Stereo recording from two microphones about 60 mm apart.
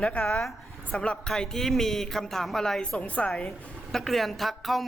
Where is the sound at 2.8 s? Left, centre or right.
Centre.